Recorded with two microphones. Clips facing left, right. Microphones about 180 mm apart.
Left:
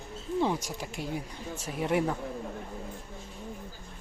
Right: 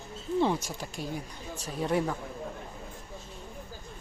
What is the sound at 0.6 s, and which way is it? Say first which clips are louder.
Speech: left 1 dB; 20° left (ahead or behind).